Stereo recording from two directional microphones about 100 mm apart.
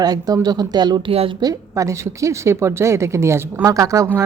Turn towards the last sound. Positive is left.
turn(degrees=-35)  # may be behind; listen again after turning